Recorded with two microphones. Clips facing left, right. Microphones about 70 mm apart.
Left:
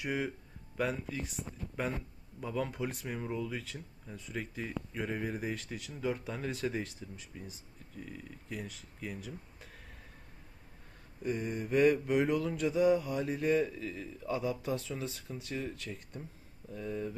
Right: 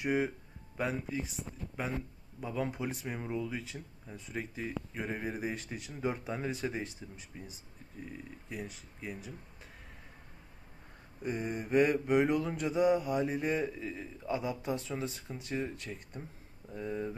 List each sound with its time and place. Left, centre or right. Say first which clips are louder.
0.0 s speech: right 4 dB; right
1.3 s speech: even; centre
5.7 s speech: even; right
11.2 s speech: left 1 dB; right
12.3 s speech: even; right; by 14.8 s centre
14.8 s speech: right 2 dB; right